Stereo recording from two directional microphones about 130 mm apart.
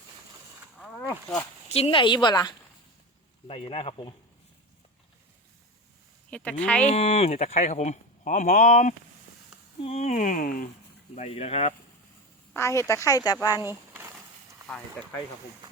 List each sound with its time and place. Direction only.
0.8 s a sound: 10° left (ahead or behind)
1.7 s a woman's voice: 45° left (ahead or behind); by 2.6 s 30° left (ahead or behind)
3.4 s speech: 45° left (ahead or behind)
6.3 s speech: 10° left (ahead or behind)
6.8 s speech: 50° left (ahead or behind); by 9.0 s 70° left (ahead or behind)
9.8 s speech: 55° left (ahead or behind); by 10.7 s 90° left
11.1 s speech: 55° left (ahead or behind)
12.5 s a woman's voice: 20° left (ahead or behind)
13.6 s a sound: 20° right (ahead or behind)
15.0 s speech: 5° left (ahead or behind)